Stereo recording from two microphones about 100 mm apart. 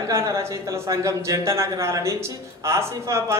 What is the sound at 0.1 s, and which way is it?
Speech, 30° right (ahead or behind).